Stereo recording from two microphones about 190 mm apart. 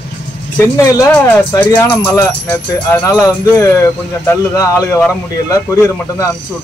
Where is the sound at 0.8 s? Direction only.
20° left (ahead or behind).